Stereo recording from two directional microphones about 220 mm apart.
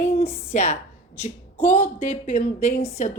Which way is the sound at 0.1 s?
30° left (ahead or behind).